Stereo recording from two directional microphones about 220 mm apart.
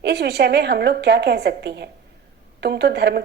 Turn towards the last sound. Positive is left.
turn(degrees=-45)  # may be behind; listen again after turning